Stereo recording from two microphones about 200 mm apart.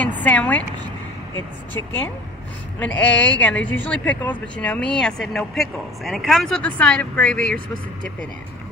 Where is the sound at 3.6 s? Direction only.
10° left (ahead or behind).